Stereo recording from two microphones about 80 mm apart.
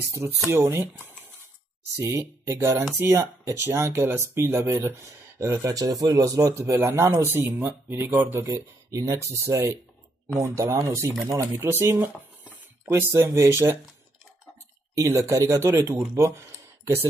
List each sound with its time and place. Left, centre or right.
0.5 s speech: right
8.5 s speech: right
12.4 s a sound: right
13.1 s speech: right
15.0 s speech: right